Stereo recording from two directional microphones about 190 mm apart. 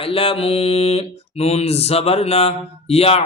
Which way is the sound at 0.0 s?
30° left (ahead or behind).